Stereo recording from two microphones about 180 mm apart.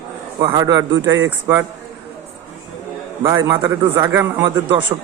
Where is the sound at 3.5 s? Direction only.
15° right (ahead or behind).